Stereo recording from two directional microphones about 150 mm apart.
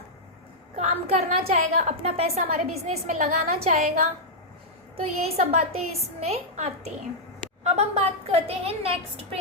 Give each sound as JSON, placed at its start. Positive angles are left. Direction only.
{"t": 0.8, "sound": "a woman's voice", "side_deg": -45}
{"t": 4.9, "sound": "a woman's voice", "side_deg": -40}